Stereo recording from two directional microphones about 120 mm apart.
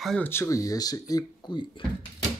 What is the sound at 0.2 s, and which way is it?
Speech, 20° left (ahead or behind).